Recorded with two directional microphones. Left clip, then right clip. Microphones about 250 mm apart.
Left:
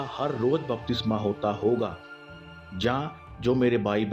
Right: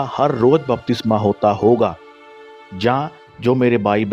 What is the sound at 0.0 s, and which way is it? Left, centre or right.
Speech, right.